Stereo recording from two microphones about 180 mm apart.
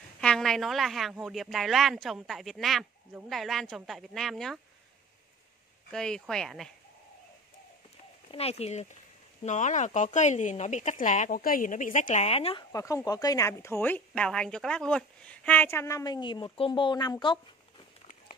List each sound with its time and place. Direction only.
0.2 s a woman's voice: 5° left (ahead or behind)
5.9 s a woman's voice: 5° left (ahead or behind)
8.3 s speech: 35° left (ahead or behind)
12.7 s speech: 20° left (ahead or behind)